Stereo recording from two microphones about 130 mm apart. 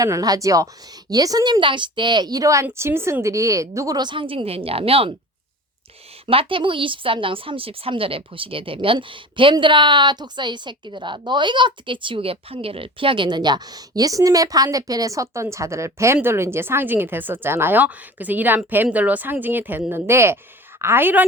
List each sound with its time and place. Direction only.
0.0 s speech: 25° right (ahead or behind); by 5.1 s 45° right (ahead or behind)
6.2 s a woman's voice: 45° right (ahead or behind); by 21.2 s 15° right (ahead or behind)